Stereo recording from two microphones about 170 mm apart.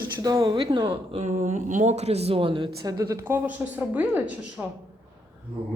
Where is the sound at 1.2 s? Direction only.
45° right (ahead or behind).